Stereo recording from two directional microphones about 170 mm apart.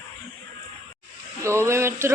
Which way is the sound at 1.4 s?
15° right (ahead or behind).